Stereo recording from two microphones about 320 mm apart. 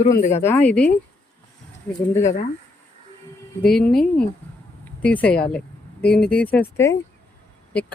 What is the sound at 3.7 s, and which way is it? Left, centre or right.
Speech, centre.